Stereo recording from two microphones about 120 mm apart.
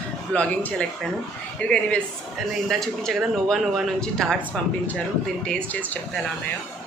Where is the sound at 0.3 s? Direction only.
10° left (ahead or behind).